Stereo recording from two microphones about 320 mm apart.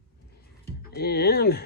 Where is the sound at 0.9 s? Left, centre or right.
Left.